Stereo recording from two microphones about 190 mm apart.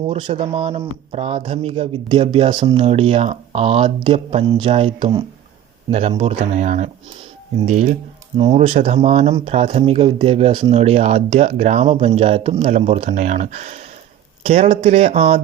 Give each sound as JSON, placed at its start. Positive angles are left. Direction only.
{"t": 0.0, "sound": "speech", "side_deg": -30}